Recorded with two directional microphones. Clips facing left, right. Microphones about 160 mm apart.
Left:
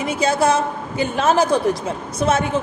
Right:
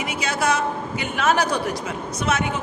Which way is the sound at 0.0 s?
30° left (ahead or behind).